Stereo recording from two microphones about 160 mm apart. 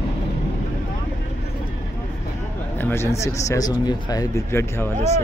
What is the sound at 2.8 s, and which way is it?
Speech, 15° left (ahead or behind).